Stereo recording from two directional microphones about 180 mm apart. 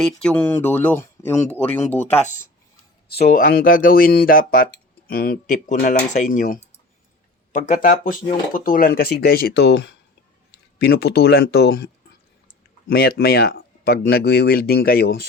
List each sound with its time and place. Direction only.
0.2 s speech: 10° left (ahead or behind)
2.1 s speech: 40° left (ahead or behind)
3.6 s speech: 50° left (ahead or behind)
12.9 s speech: 60° left (ahead or behind)